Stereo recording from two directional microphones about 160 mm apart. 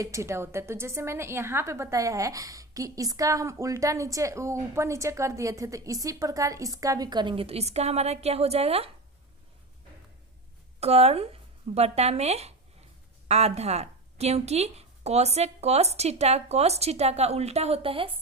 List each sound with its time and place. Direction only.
0.0 s a woman's voice: 20° right (ahead or behind); by 8.9 s 40° right (ahead or behind)
10.8 s a woman's voice: 40° right (ahead or behind)